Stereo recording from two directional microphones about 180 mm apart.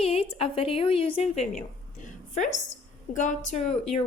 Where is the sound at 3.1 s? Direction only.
40° left (ahead or behind).